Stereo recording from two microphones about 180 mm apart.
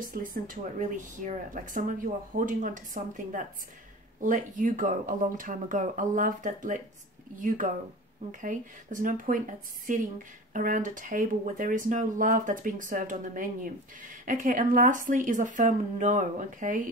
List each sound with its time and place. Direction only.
0.0 s a woman's voice: 50° right (ahead or behind)